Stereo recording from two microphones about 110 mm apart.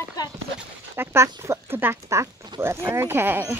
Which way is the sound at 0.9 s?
25° right (ahead or behind).